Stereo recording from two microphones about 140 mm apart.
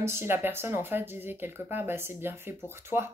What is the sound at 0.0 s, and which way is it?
Speech, 15° right (ahead or behind).